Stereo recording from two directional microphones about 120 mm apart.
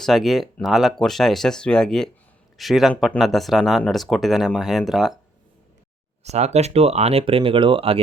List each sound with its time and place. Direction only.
0.0 s speech: centre (ahead or behind)
6.2 s speech: 65° right (ahead or behind)